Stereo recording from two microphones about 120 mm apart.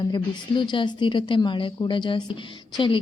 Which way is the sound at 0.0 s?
40° left (ahead or behind).